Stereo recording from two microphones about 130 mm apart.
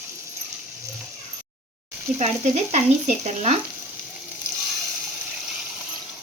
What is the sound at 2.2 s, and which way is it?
Speech, 60° right (ahead or behind).